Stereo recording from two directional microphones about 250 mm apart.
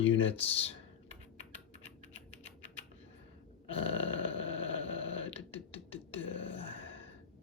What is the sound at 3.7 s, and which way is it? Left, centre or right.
Grunt, left.